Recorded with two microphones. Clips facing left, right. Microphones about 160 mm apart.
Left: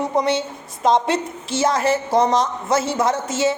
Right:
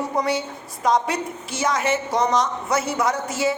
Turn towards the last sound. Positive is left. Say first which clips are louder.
# left 3 dB
turn(degrees=25)  # may be behind; listen again after turning